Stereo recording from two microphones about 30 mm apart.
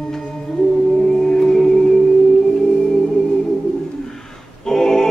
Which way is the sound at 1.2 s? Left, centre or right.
Centre.